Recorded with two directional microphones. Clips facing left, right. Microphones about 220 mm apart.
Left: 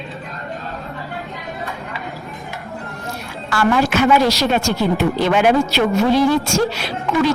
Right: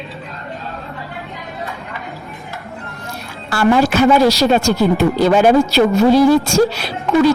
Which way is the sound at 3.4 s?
35° right (ahead or behind).